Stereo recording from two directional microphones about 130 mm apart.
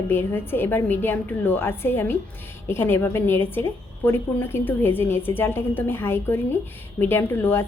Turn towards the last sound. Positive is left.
turn(degrees=20)  # may be behind; listen again after turning